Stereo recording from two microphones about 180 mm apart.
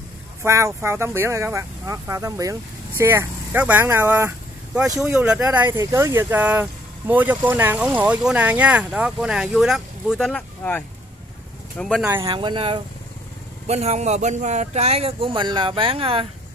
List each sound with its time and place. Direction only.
0.4 s speech: 15° right (ahead or behind)
5.1 s speech: 5° right (ahead or behind)
11.8 s speech: 5° left (ahead or behind)
12.2 s a man's voice: 25° right (ahead or behind)